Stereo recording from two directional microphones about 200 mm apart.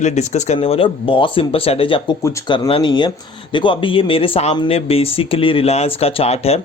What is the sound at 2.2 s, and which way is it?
Speech, 15° left (ahead or behind).